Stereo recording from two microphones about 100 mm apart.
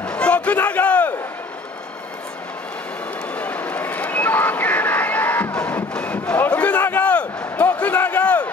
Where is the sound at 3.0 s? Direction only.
15° left (ahead or behind).